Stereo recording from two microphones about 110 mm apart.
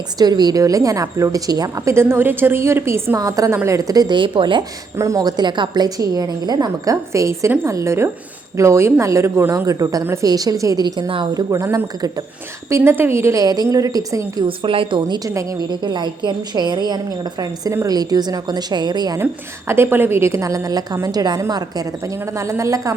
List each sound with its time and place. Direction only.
0.2 s a woman's voice: 40° right (ahead or behind); by 3.2 s 20° right (ahead or behind)
3.2 s a woman's voice: 30° right (ahead or behind); by 4.6 s 50° right (ahead or behind)
4.9 s a woman's voice: 30° right (ahead or behind)
14.4 s a woman's voice: 55° right (ahead or behind)
15.2 s a woman's voice: 30° right (ahead or behind)
15.8 s a woman's voice: 40° right (ahead or behind)
19.2 s a woman's voice: 20° right (ahead or behind)